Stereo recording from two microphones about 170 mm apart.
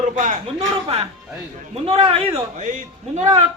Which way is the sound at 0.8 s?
35° right (ahead or behind).